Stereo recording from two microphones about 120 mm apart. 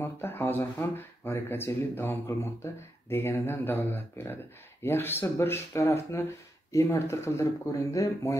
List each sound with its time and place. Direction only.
0.0 s speech: 20° left (ahead or behind)